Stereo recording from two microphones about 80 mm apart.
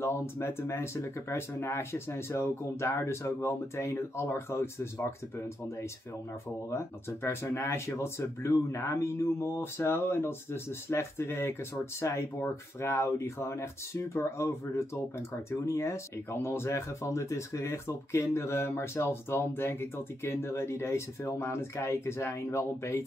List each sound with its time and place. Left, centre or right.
0.0 s speech: left
6.7 s speech: left